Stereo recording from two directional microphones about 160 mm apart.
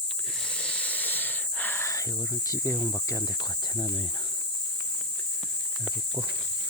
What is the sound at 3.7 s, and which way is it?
Speech, 25° left (ahead or behind).